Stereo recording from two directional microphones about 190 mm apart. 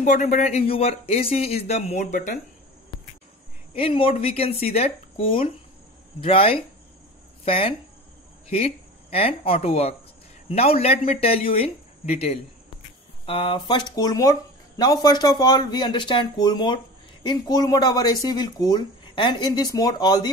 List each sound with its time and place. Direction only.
0.0 s speech: 40° left (ahead or behind)
2.9 s a sound: 25° left (ahead or behind)
3.7 s speech: 30° left (ahead or behind)